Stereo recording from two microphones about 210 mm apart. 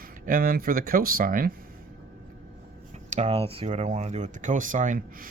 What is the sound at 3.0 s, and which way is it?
Speech, 35° right (ahead or behind).